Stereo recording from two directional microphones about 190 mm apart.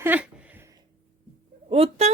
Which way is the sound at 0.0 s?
10° right (ahead or behind).